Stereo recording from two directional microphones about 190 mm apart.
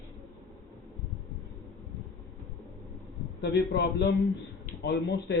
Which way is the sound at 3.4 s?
65° left (ahead or behind).